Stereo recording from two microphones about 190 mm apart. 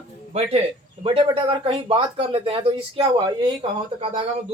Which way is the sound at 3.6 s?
35° right (ahead or behind).